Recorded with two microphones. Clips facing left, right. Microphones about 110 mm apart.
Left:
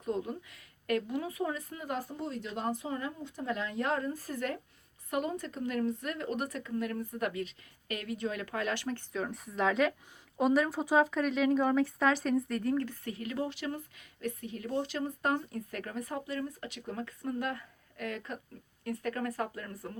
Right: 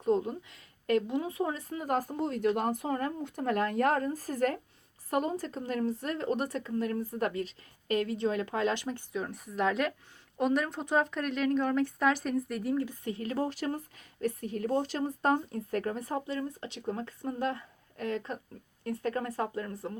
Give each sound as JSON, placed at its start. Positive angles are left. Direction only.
{"t": 0.0, "sound": "a sound", "side_deg": -35}
{"t": 0.9, "sound": "speech", "side_deg": -25}
{"t": 9.1, "sound": "speech", "side_deg": 0}
{"t": 13.1, "sound": "speech", "side_deg": -35}